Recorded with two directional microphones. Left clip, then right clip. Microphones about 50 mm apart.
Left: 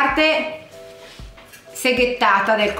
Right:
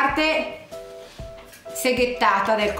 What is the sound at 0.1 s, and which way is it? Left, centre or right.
Music, centre.